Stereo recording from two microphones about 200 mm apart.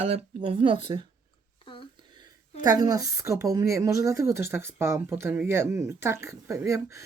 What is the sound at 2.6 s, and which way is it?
Speech, 20° right (ahead or behind).